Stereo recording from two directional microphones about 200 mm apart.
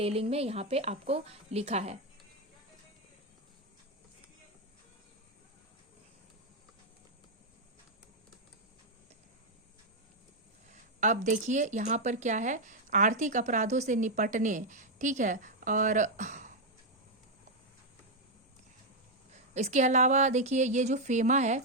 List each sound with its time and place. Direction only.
0.0 s a woman's voice: 30° right (ahead or behind)
10.7 s a woman's voice: 40° right (ahead or behind)
19.5 s a woman's voice: 35° right (ahead or behind)